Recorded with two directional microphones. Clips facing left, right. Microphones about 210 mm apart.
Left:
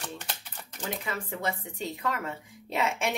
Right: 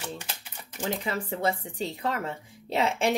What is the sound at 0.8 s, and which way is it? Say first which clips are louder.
Speech: right 4 dB; 30° right (ahead or behind).